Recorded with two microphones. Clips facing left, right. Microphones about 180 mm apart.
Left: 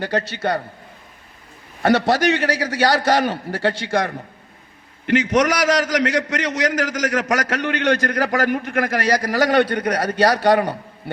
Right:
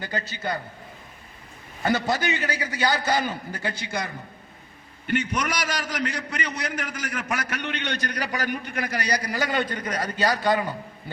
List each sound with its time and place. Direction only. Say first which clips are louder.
0.0 s a man's voice: left 8 dB; 75° left (ahead or behind)
1.8 s a man's voice: left 8 dB; 75° left (ahead or behind)